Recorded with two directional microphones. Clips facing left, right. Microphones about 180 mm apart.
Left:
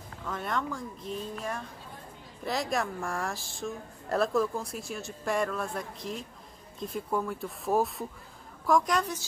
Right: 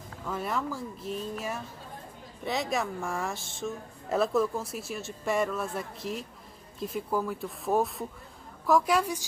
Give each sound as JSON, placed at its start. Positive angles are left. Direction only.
{"t": 0.2, "sound": "a woman's voice", "side_deg": -5}